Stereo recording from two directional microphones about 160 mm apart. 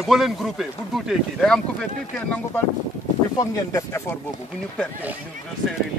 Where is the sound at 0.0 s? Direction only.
Centre (ahead or behind).